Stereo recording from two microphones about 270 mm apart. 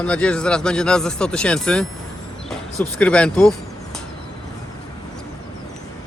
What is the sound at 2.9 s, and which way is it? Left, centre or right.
Speech, centre.